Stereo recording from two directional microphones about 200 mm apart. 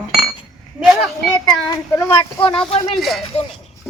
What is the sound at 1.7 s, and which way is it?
Speech, 15° left (ahead or behind).